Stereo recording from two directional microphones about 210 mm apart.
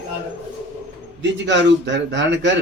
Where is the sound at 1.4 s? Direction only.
55° right (ahead or behind).